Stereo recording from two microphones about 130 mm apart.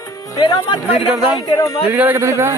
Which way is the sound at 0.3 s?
35° left (ahead or behind).